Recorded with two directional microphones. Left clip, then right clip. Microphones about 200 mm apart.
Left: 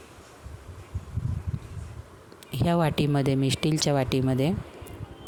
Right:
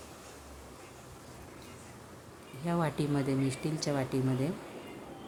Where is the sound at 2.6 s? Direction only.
45° left (ahead or behind).